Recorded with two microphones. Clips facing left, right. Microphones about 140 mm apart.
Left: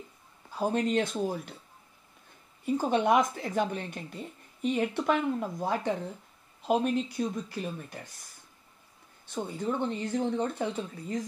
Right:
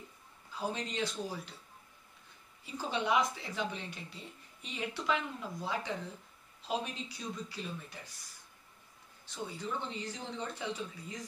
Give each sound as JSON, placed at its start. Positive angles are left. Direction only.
{"t": 0.5, "sound": "speech", "side_deg": 50}
{"t": 2.6, "sound": "speech", "side_deg": 50}
{"t": 9.2, "sound": "speech", "side_deg": 55}